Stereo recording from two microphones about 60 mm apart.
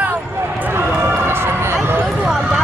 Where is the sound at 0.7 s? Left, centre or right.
Right.